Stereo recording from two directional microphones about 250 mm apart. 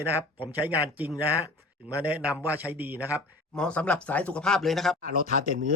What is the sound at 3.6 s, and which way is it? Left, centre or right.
Speech, centre.